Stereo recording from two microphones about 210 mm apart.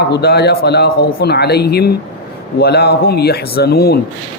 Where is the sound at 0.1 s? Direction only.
50° left (ahead or behind).